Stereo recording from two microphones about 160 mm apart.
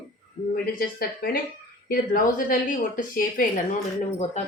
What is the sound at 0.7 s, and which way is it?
A woman's voice, 70° left (ahead or behind).